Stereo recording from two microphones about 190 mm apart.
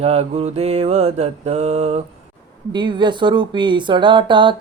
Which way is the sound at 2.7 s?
25° right (ahead or behind).